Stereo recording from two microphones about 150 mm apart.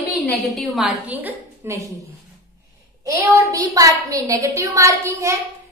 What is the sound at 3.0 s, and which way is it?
A woman's voice, 20° right (ahead or behind).